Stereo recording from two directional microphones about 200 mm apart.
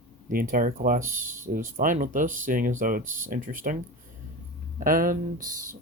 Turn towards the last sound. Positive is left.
turn(degrees=-45)  # may be behind; listen again after turning